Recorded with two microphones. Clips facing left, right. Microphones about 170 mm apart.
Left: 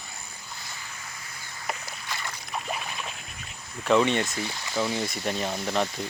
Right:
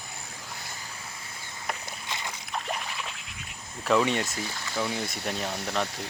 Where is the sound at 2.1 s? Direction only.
20° right (ahead or behind).